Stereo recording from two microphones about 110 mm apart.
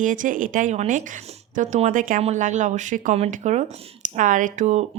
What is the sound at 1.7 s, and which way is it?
A woman's voice, 75° right (ahead or behind).